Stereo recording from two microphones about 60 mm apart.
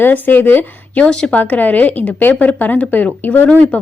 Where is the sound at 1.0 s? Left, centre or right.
Centre.